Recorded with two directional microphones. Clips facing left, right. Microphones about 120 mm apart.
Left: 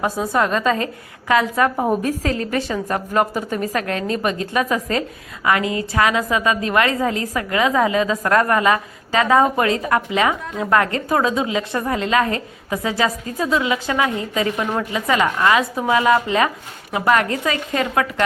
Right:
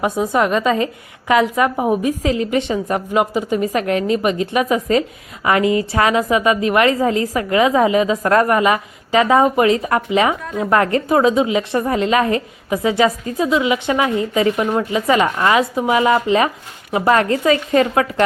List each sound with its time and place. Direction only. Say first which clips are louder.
0.0 s a woman's voice: right 3 dB; 15° right (ahead or behind)
1.7 s a woman's voice: right 2 dB; 10° right (ahead or behind); by 18.0 s 25° right (ahead or behind)